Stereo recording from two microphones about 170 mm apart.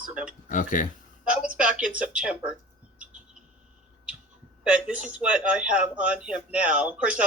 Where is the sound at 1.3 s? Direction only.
5° right (ahead or behind).